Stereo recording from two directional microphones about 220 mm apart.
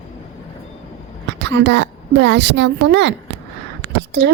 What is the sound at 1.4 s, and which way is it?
A woman's voice, 50° right (ahead or behind).